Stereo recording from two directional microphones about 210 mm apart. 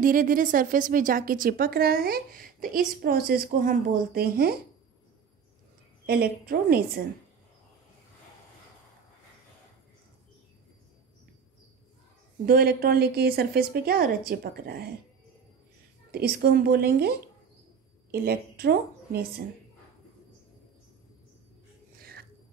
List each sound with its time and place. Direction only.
0.0 s a woman's voice: 40° right (ahead or behind)
6.0 s a woman's voice: 45° right (ahead or behind)
12.4 s a woman's voice: 45° right (ahead or behind)
16.1 s a woman's voice: 50° right (ahead or behind)
18.1 s a woman's voice: 50° right (ahead or behind)
21.9 s a sound: 45° right (ahead or behind)